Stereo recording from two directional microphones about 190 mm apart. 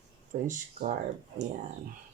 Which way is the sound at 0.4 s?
45° right (ahead or behind).